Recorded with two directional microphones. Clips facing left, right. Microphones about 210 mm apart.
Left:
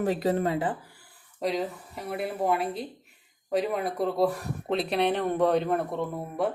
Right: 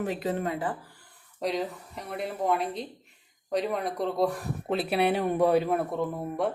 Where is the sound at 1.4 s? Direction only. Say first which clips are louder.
Left 1 dB; centre (ahead or behind).